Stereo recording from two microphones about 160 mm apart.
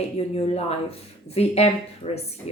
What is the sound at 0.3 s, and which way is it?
Speech, 40° left (ahead or behind).